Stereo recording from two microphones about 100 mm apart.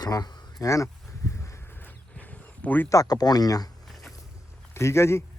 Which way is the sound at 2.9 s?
35° left (ahead or behind).